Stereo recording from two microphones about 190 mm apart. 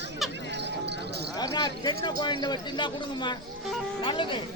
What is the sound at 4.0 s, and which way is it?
Music, 25° left (ahead or behind).